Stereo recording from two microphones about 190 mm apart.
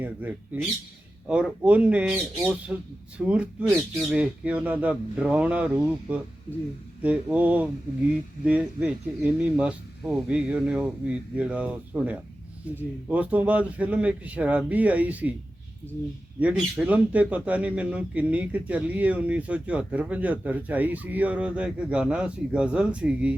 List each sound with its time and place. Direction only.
0.0 s speech: 10° right (ahead or behind)
16.4 s speech: 10° right (ahead or behind)